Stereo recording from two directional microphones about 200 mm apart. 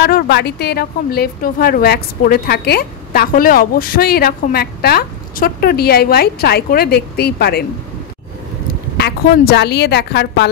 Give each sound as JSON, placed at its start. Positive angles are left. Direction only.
{"t": 0.0, "sound": "a woman's voice", "side_deg": 55}
{"t": 8.9, "sound": "a woman's voice", "side_deg": 50}